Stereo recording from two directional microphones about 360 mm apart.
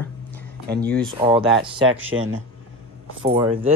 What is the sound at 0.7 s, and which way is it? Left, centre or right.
Speech, right.